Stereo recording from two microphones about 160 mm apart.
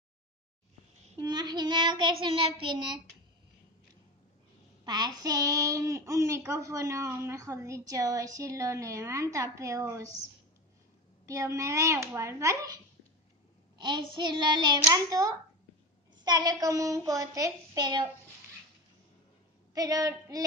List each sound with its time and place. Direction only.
1.2 s a child's voice: 25° right (ahead or behind)
4.8 s a child's voice: 25° right (ahead or behind)
11.2 s a child's voice: 20° right (ahead or behind)
19.7 s a child's voice: 25° right (ahead or behind)